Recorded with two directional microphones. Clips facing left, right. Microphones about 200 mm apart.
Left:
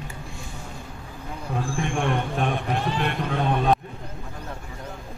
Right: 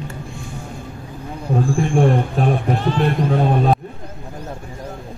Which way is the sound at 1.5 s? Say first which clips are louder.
Right 9 dB; 35° right (ahead or behind).